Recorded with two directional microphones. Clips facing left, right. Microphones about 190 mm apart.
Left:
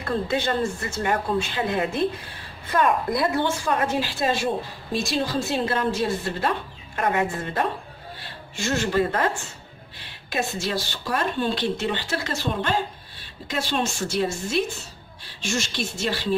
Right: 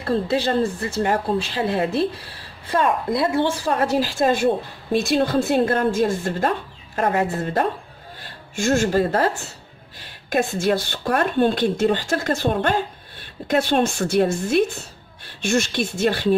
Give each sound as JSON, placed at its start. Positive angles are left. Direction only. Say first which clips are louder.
{"t": 0.0, "sound": "speech", "louder": "right 4 dB", "side_deg": -35}
{"t": 7.0, "sound": "a woman's voice", "louder": "right 3 dB", "side_deg": -35}